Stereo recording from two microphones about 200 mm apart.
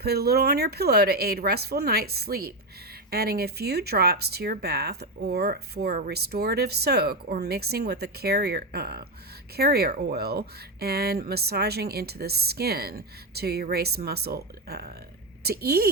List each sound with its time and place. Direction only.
0.0 s speech: 50° right (ahead or behind)